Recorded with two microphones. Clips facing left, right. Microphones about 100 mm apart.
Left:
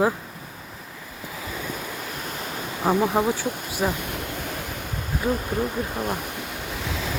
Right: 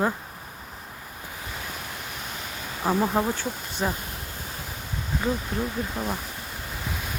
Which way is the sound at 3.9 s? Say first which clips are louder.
Left 4 dB; 75° left (ahead or behind).